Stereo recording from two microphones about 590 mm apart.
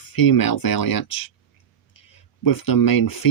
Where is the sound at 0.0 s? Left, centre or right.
Left.